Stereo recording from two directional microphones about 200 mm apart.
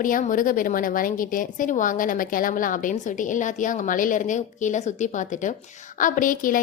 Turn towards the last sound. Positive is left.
turn(degrees=45)  # may be behind; listen again after turning